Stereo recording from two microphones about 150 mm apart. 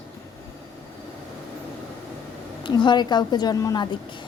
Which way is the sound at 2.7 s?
30° left (ahead or behind).